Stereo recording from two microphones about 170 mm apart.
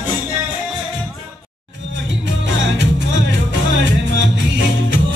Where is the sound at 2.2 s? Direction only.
90° right.